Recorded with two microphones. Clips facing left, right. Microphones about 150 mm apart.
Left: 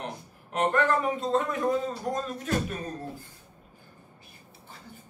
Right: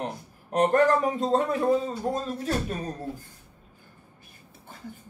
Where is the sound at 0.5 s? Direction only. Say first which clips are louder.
Right 4 dB; 40° right (ahead or behind).